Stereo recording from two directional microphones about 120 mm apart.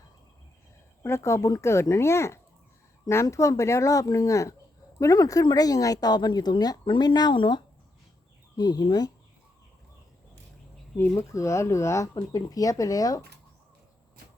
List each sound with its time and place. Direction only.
1.0 s speech: 25° left (ahead or behind)
11.1 s speech: 25° left (ahead or behind)